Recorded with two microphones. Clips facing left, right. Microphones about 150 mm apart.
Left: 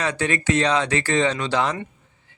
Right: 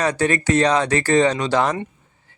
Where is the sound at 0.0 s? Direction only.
40° right (ahead or behind).